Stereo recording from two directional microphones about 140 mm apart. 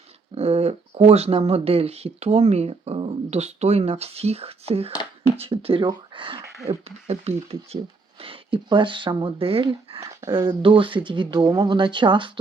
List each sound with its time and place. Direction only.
0.3 s speech: 50° right (ahead or behind)
6.7 s speech: 45° right (ahead or behind)
10.0 s speech: 20° right (ahead or behind)
10.3 s speech: 35° right (ahead or behind)